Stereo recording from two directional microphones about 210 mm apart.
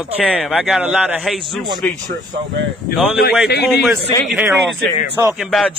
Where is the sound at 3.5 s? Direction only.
50° left (ahead or behind).